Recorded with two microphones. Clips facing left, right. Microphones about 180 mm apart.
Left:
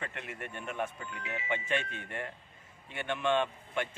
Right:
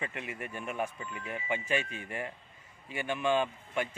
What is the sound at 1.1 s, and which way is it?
Speech, 80° left.